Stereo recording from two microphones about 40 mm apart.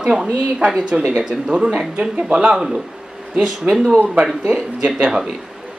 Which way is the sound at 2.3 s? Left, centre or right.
Right.